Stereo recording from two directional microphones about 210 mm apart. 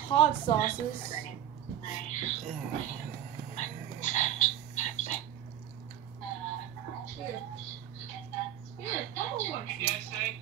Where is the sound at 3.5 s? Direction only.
35° left (ahead or behind).